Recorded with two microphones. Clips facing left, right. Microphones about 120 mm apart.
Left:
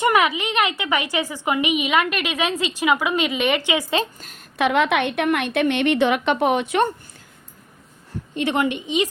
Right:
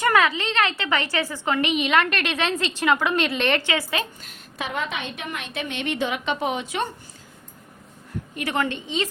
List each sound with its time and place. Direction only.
0.0 s a woman's voice: 15° left (ahead or behind)
4.5 s a woman's voice: 70° left (ahead or behind)
8.4 s a woman's voice: 20° left (ahead or behind)